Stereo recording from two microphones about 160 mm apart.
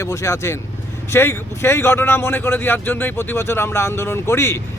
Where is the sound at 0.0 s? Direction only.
15° left (ahead or behind).